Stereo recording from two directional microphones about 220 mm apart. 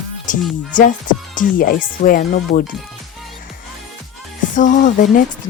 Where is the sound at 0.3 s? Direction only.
35° left (ahead or behind).